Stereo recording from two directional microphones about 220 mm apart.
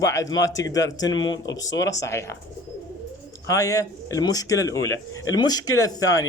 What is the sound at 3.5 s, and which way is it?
A man's voice, 15° left (ahead or behind).